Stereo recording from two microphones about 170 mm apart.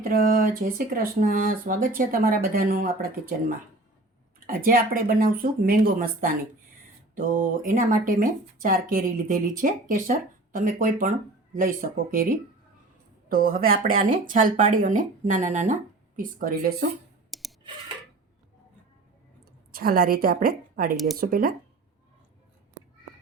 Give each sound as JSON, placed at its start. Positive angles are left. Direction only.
{"t": 0.0, "sound": "speech", "side_deg": -55}
{"t": 4.4, "sound": "speech", "side_deg": -55}
{"t": 17.3, "sound": "clicking", "side_deg": 0}
{"t": 19.7, "sound": "speech", "side_deg": -60}
{"t": 20.9, "sound": "speech", "side_deg": 0}
{"t": 21.2, "sound": "speech", "side_deg": -55}